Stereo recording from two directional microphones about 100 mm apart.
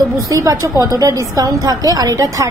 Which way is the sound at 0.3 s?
35° right (ahead or behind).